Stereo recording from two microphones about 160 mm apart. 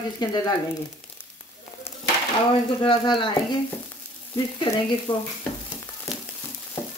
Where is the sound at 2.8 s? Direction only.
30° left (ahead or behind).